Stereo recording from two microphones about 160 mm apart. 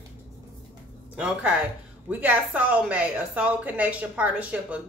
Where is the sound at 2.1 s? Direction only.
10° right (ahead or behind).